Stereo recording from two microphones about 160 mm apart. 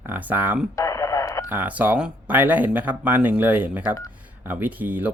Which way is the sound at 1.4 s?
10° right (ahead or behind).